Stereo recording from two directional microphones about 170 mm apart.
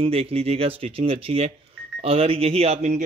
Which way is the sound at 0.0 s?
35° right (ahead or behind).